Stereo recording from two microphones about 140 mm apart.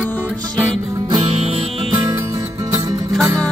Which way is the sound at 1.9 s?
20° right (ahead or behind).